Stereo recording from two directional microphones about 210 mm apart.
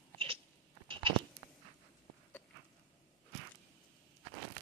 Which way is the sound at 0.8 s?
25° right (ahead or behind).